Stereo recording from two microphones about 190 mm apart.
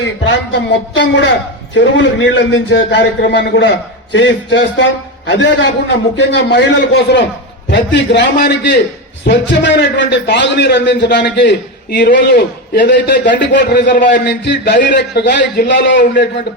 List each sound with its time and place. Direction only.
0.0 s a man's voice: 70° left (ahead or behind)
13.9 s a man's voice: 45° left (ahead or behind)
14.3 s a man's voice: 60° left (ahead or behind)